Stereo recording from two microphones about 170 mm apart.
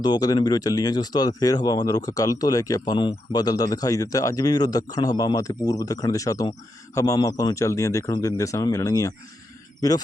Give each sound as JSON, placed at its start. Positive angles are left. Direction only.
{"t": 0.0, "sound": "speech", "side_deg": 25}